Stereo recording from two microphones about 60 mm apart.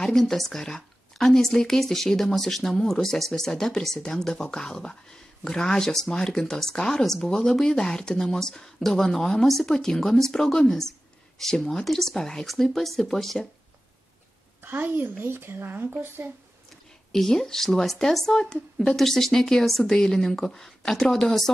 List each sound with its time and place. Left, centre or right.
0.0 s speech: centre
14.6 s speech: right
17.1 s speech: centre